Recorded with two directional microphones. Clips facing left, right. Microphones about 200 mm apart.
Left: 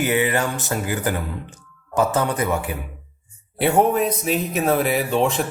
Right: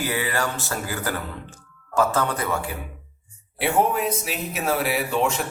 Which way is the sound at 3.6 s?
35° left (ahead or behind).